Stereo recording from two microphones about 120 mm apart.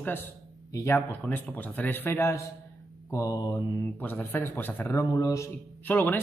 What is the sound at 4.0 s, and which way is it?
Speech, 15° left (ahead or behind).